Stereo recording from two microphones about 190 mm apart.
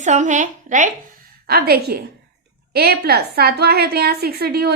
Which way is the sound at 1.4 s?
55° right (ahead or behind).